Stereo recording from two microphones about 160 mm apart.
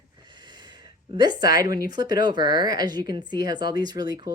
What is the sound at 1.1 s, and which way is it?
A woman's voice, 25° right (ahead or behind).